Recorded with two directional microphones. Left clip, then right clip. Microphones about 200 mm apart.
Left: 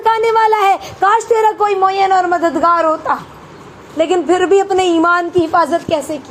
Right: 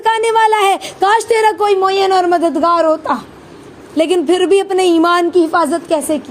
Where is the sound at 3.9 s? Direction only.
90° right.